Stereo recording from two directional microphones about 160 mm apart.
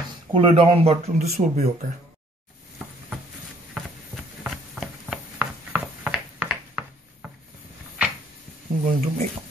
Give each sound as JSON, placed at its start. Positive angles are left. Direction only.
{"t": 0.3, "sound": "speech", "side_deg": -35}
{"t": 1.1, "sound": "speech", "side_deg": -50}
{"t": 4.4, "sound": "a sound", "side_deg": 0}
{"t": 8.8, "sound": "speech", "side_deg": -50}